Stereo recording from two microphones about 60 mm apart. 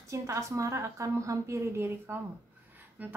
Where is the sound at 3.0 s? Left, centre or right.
Right.